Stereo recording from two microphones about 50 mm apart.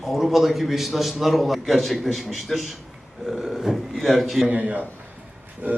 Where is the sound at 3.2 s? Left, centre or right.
Centre.